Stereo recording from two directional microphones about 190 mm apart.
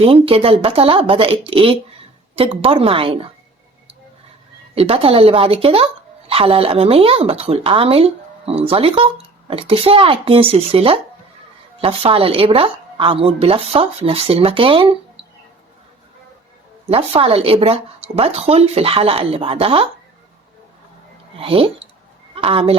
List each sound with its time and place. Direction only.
0.0 s speech: 30° right (ahead or behind)
4.7 s speech: 30° right (ahead or behind)
16.8 s speech: 30° right (ahead or behind)
21.3 s speech: 30° right (ahead or behind)